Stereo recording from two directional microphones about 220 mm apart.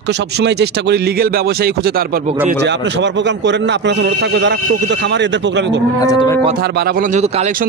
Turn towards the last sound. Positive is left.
turn(degrees=-30)  # may be behind; listen again after turning